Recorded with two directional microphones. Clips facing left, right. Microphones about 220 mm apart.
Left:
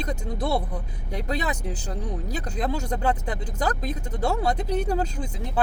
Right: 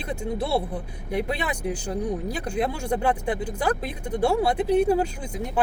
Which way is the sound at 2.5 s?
10° right (ahead or behind).